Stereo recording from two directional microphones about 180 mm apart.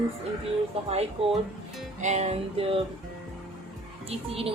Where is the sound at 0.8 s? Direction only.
35° right (ahead or behind).